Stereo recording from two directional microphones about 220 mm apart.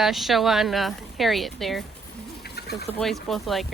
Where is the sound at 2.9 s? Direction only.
Centre (ahead or behind).